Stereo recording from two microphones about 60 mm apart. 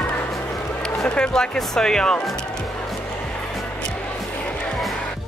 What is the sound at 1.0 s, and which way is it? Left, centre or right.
Music, centre.